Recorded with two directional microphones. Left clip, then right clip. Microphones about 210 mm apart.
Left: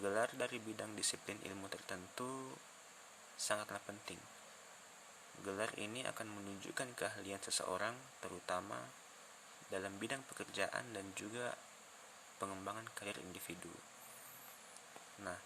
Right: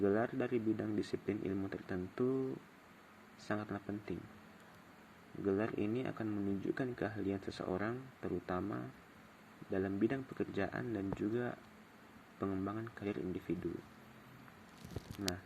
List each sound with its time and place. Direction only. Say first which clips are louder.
0.0 s speech: right 4 dB; 30° left (ahead or behind)
3.3 s speech: even; 30° left (ahead or behind)
5.5 s speech: right 6 dB; 30° left (ahead or behind)
15.2 s speech: right 5 dB; 30° left (ahead or behind)